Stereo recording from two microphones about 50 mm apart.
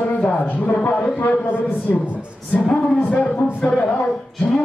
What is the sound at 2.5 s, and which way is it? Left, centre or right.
Speech, centre.